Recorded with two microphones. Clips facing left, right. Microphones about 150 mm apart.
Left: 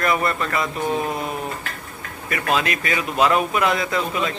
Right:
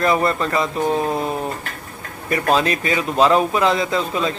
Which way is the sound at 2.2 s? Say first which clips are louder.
Right 4 dB; 35° right (ahead or behind).